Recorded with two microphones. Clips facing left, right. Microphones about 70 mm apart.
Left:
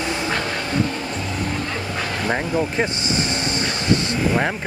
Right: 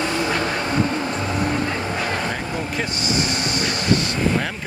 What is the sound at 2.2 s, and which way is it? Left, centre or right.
Vehicle, left.